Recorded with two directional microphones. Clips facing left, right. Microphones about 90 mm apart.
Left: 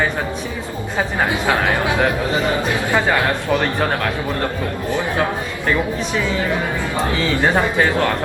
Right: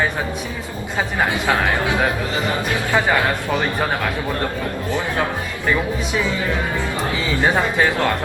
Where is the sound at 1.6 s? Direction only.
20° left (ahead or behind).